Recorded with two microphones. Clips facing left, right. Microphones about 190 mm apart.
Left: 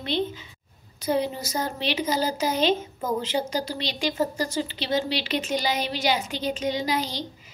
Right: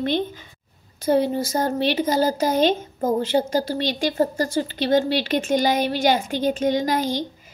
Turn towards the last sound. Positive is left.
turn(degrees=-50)  # may be behind; listen again after turning